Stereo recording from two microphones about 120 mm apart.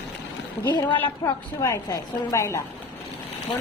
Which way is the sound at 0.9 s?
15° left (ahead or behind).